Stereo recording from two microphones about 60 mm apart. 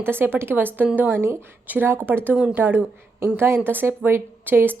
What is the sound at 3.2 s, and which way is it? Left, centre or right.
Speech, right.